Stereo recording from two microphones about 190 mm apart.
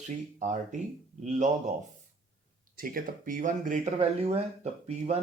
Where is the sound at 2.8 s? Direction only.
45° right (ahead or behind).